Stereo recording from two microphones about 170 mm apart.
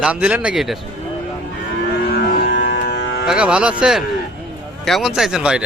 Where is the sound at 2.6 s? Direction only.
80° left.